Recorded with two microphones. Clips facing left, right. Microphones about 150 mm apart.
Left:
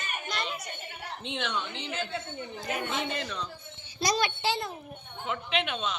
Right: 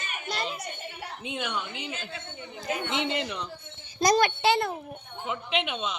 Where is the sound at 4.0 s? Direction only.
50° right (ahead or behind); by 4.7 s 65° right (ahead or behind).